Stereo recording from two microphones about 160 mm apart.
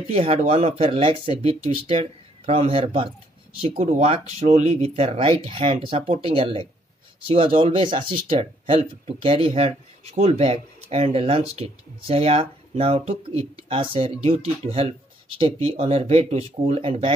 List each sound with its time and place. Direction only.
0.1 s speech: 40° right (ahead or behind)
3.7 s speech: 45° right (ahead or behind)